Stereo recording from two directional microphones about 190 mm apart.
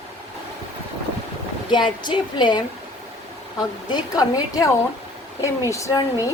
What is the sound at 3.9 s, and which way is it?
A woman's voice, 20° left (ahead or behind).